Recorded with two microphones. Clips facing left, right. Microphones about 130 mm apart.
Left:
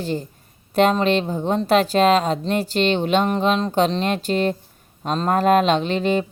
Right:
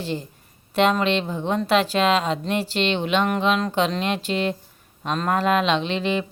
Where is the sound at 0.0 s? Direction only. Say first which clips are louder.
Left 3 dB; 45° left (ahead or behind).